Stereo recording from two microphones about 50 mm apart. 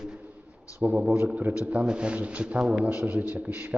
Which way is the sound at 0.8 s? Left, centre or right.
Right.